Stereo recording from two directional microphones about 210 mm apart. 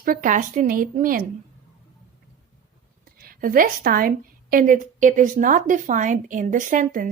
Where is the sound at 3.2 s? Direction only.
45° right (ahead or behind).